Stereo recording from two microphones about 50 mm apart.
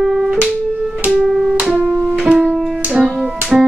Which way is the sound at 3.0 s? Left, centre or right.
Centre.